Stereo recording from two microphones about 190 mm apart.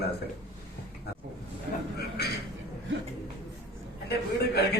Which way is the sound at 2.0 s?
60° left (ahead or behind).